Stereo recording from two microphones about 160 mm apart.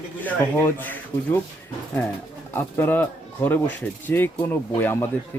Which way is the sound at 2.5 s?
15° left (ahead or behind).